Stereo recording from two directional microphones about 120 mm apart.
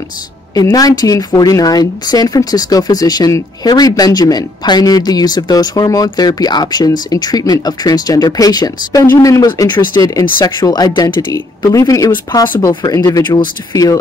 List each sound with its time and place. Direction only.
0.6 s speech: 30° left (ahead or behind)